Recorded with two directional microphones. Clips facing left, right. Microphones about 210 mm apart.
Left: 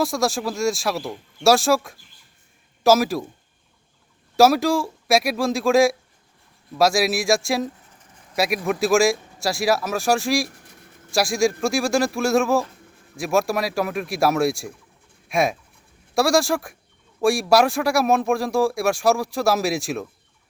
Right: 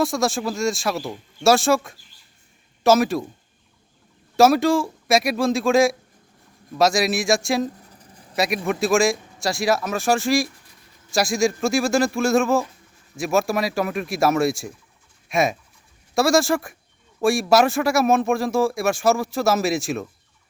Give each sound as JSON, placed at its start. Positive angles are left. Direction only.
{"t": 0.0, "sound": "speech", "side_deg": 0}
{"t": 4.4, "sound": "speech", "side_deg": 0}
{"t": 7.8, "sound": "a sound", "side_deg": -35}
{"t": 8.4, "sound": "speech", "side_deg": 0}
{"t": 10.5, "sound": "a sound", "side_deg": 70}
{"t": 11.1, "sound": "speech", "side_deg": 0}